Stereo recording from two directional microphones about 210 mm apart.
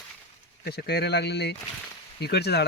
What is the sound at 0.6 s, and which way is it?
Speech, 50° left (ahead or behind).